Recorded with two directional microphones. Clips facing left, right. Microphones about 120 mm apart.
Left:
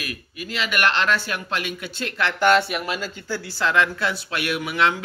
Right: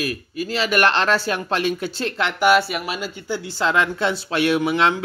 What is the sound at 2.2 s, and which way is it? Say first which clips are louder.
Speech: right 1 dB; 10° right (ahead or behind).